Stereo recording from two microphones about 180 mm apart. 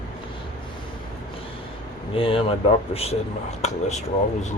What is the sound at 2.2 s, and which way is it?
Speech, 30° left (ahead or behind).